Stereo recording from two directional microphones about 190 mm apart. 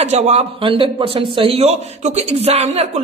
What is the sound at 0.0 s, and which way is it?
A man's voice, 35° right (ahead or behind).